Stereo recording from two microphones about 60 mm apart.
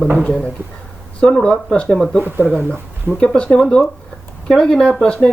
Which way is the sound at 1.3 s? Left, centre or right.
Centre.